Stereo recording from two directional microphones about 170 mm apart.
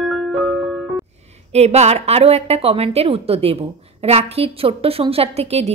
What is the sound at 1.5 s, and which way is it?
A woman's voice, 40° right (ahead or behind).